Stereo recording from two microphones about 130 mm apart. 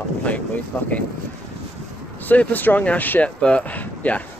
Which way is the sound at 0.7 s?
15° left (ahead or behind).